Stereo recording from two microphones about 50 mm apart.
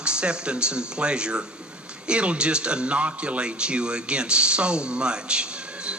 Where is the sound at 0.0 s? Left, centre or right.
Centre.